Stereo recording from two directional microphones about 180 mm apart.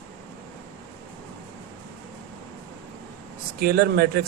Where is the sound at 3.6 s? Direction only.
60° right (ahead or behind).